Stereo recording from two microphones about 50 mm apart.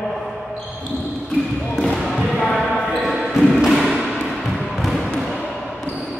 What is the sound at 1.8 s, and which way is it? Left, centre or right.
Basketball bounce, centre.